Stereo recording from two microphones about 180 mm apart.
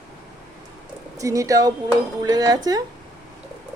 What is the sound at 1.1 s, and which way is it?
Speech, 20° right (ahead or behind).